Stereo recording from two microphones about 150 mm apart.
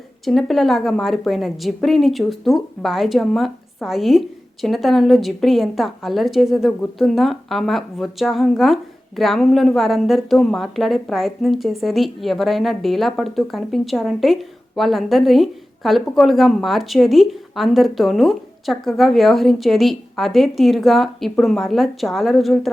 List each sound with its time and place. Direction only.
0.3 s a woman's voice: centre (ahead or behind)